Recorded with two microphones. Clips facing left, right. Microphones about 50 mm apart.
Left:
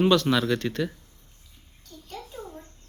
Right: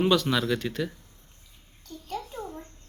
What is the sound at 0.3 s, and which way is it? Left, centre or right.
Speech, centre.